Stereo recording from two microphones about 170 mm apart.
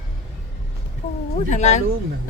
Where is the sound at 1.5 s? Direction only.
45° left (ahead or behind).